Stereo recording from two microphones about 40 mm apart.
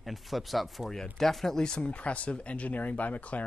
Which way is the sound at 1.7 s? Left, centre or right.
Left.